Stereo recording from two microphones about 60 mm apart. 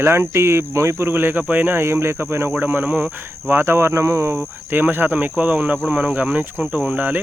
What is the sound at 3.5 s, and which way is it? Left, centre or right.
Speech, right.